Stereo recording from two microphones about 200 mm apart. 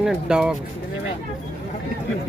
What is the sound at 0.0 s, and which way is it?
Speech, 5° right (ahead or behind).